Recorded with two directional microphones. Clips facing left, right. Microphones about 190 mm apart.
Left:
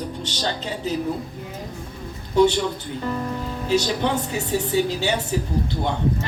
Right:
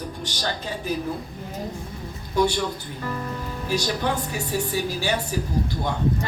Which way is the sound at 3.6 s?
20° left (ahead or behind).